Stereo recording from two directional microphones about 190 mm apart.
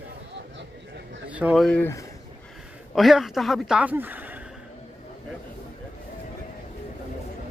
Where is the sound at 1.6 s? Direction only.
10° left (ahead or behind).